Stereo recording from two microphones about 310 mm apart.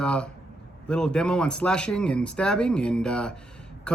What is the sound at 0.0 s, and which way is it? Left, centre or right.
A man's voice, centre.